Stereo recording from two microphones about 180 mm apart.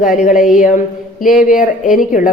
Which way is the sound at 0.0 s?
45° left (ahead or behind).